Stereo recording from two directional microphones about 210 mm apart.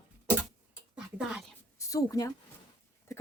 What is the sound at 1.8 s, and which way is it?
Speech, 15° left (ahead or behind).